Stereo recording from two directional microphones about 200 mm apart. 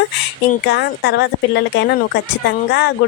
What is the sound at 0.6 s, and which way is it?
A woman's voice, 55° left (ahead or behind).